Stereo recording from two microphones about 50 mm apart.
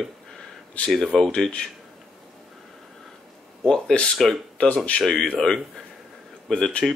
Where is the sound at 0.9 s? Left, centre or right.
Centre.